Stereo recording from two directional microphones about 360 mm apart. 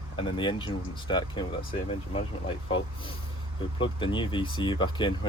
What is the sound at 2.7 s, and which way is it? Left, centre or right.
Speech, centre.